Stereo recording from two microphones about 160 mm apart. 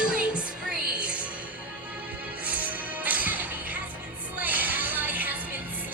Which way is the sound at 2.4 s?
10° right (ahead or behind).